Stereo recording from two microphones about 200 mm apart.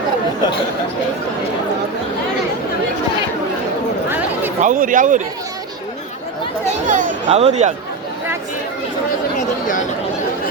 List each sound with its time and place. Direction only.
4.6 s speech: 40° right (ahead or behind)
6.8 s speech: 40° right (ahead or behind)